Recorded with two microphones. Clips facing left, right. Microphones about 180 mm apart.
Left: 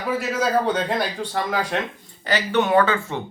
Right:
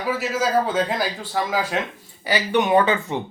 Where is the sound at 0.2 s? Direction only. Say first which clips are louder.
Even; 5° right (ahead or behind).